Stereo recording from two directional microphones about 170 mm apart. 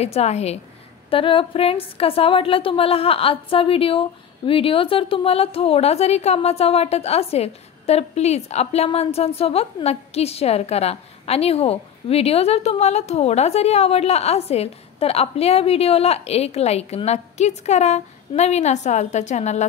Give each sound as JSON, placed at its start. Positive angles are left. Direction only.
{"t": 0.0, "sound": "a woman's voice", "side_deg": 40}